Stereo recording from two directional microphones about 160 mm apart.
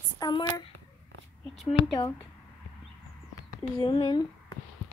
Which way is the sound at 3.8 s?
30° left (ahead or behind).